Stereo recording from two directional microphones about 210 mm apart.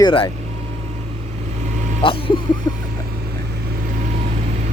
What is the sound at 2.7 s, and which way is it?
Vehicle, 15° left (ahead or behind).